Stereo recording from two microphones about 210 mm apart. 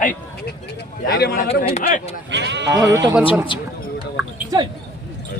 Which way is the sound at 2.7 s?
15° right (ahead or behind).